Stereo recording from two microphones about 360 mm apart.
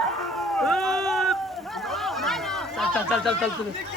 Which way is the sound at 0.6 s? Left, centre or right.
Centre.